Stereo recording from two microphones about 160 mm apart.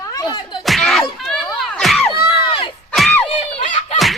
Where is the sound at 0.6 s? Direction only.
Centre (ahead or behind).